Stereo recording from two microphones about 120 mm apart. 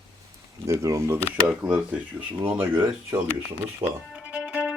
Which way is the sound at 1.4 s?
10° right (ahead or behind).